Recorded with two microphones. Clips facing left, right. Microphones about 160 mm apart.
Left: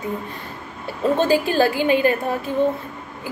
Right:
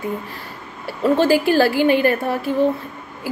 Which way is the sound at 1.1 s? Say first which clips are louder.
Right 3 dB; 20° left (ahead or behind).